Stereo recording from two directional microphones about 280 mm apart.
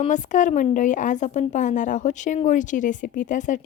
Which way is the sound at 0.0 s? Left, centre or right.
Left.